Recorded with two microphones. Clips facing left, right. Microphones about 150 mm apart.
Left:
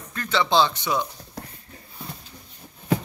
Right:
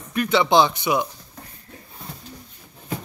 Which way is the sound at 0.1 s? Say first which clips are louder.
Right 4 dB; 15° right (ahead or behind).